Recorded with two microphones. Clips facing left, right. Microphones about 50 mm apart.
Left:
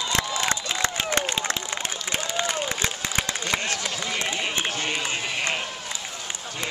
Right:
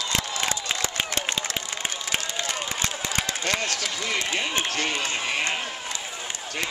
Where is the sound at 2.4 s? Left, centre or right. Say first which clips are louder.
Left 3 dB; centre.